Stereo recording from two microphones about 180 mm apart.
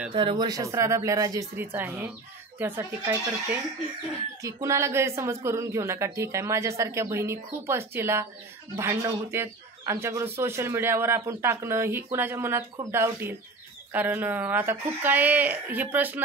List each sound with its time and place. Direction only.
0.1 s speech: 25° right (ahead or behind)
4.4 s speech: 15° right (ahead or behind)